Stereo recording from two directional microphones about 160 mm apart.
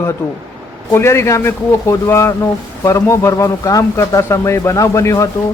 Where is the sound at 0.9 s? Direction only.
15° left (ahead or behind).